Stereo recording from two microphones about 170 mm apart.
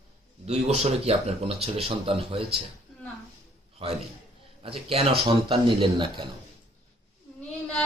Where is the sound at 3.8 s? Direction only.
35° right (ahead or behind).